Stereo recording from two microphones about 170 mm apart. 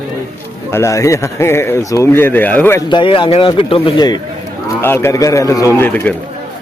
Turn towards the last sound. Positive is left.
turn(degrees=10)  # may be behind; listen again after turning